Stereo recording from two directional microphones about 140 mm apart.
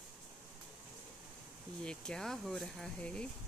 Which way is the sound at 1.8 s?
5° left (ahead or behind).